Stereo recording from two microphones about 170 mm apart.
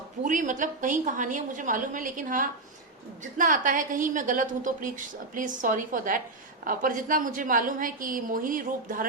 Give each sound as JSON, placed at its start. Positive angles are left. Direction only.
{"t": 0.3, "sound": "a woman's voice", "side_deg": -50}